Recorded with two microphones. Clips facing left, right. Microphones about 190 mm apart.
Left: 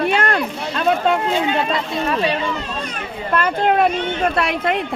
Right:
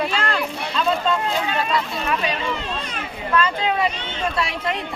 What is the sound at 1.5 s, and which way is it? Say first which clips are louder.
Speech: left 3 dB; 25° left (ahead or behind).